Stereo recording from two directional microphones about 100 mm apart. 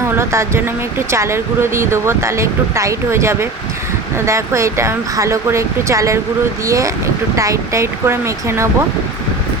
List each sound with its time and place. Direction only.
0.2 s speech: 25° right (ahead or behind)